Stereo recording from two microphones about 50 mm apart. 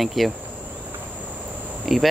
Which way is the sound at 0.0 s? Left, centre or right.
Centre.